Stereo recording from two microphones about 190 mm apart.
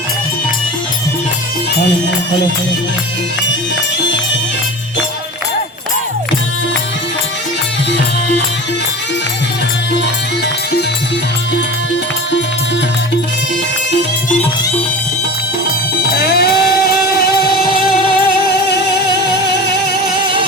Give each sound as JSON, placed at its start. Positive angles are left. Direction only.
{"t": 16.1, "sound": "music", "side_deg": 55}